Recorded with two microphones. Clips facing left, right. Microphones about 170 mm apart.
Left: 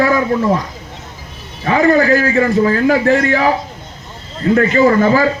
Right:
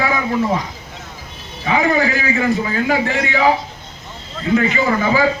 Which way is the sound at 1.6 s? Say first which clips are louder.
Left 5 dB; 55° left (ahead or behind).